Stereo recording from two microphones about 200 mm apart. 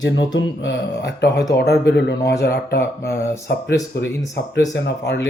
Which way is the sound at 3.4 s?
55° left (ahead or behind).